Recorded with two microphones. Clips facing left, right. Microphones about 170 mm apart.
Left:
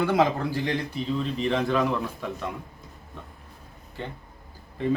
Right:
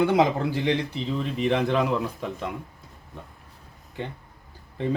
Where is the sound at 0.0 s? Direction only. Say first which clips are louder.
Right 2 dB; 20° right (ahead or behind).